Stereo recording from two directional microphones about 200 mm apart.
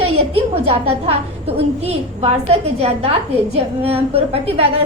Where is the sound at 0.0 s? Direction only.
30° right (ahead or behind).